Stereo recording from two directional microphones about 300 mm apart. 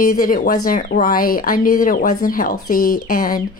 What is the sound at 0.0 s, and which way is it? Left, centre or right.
Speech, left.